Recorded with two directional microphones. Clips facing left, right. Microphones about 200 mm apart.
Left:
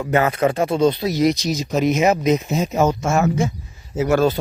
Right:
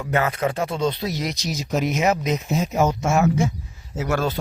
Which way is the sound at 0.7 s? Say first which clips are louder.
Left 7 dB; 40° left (ahead or behind).